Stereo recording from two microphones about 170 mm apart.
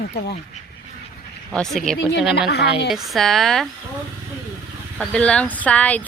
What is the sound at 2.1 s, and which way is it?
Speech, 85° left.